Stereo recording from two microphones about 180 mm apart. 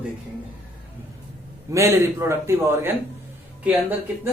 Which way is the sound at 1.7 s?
15° right (ahead or behind).